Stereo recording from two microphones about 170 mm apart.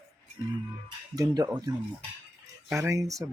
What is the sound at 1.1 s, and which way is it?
Speech, 20° right (ahead or behind).